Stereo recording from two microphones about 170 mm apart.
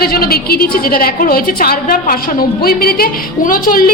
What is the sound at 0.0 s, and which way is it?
A woman's voice, 65° left (ahead or behind).